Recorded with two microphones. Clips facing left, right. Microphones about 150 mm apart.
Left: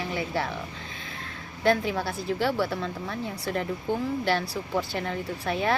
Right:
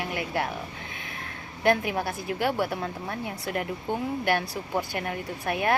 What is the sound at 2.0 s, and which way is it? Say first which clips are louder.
A woman's voice: left 1 dB; 20° right (ahead or behind).